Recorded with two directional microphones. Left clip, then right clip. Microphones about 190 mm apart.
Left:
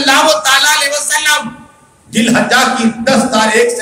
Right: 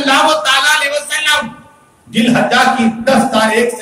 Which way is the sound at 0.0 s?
Centre (ahead or behind).